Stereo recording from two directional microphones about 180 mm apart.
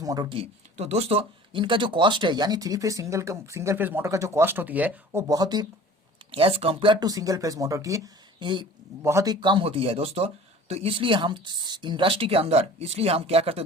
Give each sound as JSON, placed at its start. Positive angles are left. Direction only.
{"t": 0.0, "sound": "speech", "side_deg": -20}
{"t": 5.3, "sound": "speech", "side_deg": -20}